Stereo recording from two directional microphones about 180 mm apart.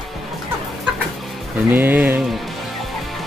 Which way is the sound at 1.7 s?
10° right (ahead or behind).